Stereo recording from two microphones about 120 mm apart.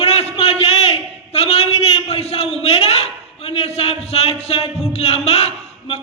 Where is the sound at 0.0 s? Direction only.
60° left (ahead or behind).